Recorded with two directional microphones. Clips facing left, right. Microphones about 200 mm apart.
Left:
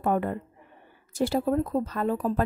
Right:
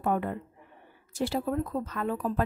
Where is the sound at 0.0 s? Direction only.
45° left (ahead or behind).